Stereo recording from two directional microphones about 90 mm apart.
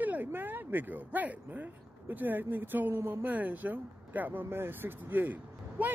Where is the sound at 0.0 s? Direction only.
20° right (ahead or behind).